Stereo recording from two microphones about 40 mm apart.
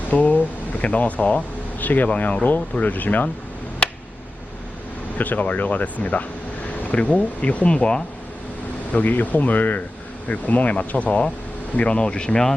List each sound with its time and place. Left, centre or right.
0.1 s speech: left
3.8 s a sound: left
5.1 s speech: left
8.9 s speech: left
11.8 s speech: left